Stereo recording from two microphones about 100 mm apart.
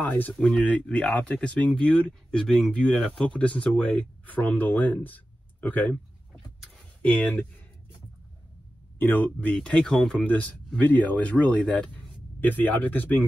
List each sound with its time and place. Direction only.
0.0 s speech: 15° left (ahead or behind)
7.0 s speech: 15° left (ahead or behind)
8.9 s speech: 20° left (ahead or behind)